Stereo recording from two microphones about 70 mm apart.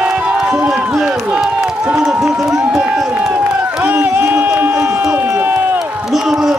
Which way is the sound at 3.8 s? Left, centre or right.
Right.